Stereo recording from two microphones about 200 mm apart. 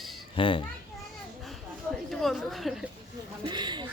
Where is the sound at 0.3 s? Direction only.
25° left (ahead or behind).